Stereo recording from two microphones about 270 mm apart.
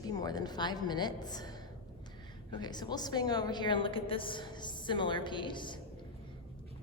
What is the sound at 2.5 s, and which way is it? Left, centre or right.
A woman's voice, centre.